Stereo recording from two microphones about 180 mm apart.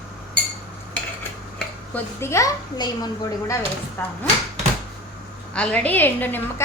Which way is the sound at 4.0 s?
10° left (ahead or behind).